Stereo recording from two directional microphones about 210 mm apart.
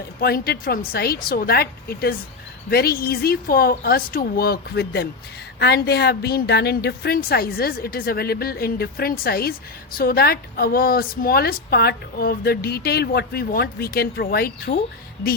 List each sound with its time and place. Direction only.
0.2 s a woman's voice: 45° left (ahead or behind)